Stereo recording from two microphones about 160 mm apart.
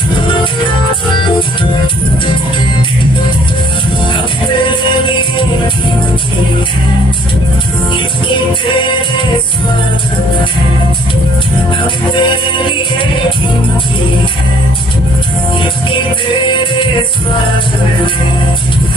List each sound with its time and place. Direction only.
4.6 s music: 30° left (ahead or behind)
8.3 s music: 30° left (ahead or behind)
12.1 s music: 30° left (ahead or behind)
16.4 s music: 30° left (ahead or behind)